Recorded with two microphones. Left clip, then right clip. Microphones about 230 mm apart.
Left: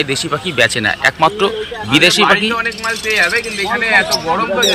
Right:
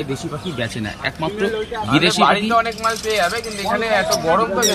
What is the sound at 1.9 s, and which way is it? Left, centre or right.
Speech, centre.